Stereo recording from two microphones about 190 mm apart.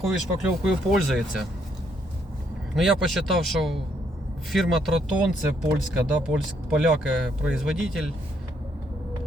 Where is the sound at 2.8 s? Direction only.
Centre (ahead or behind).